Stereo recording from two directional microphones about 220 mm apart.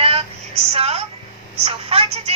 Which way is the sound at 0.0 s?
25° right (ahead or behind).